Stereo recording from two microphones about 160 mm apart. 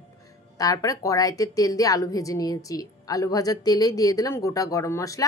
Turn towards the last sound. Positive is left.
turn(degrees=20)  # may be behind; listen again after turning